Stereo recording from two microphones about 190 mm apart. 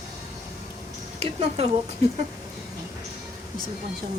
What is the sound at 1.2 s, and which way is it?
Speech, 35° right (ahead or behind).